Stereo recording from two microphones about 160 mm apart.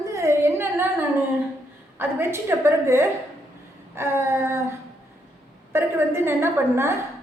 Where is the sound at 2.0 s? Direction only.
15° right (ahead or behind).